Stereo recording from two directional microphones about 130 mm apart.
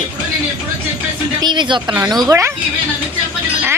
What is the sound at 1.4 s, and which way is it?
Speech, 35° right (ahead or behind).